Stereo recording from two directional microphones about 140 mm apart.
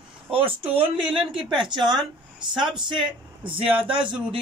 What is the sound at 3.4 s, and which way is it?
Speech, 10° right (ahead or behind).